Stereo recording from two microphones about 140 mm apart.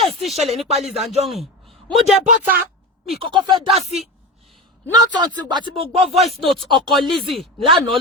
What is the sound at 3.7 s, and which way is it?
Speech, 50° right (ahead or behind).